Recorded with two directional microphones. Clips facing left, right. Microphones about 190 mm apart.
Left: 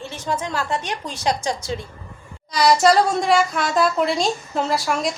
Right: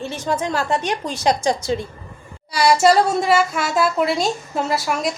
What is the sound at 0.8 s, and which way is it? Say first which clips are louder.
Speech: right 4 dB; 20° right (ahead or behind).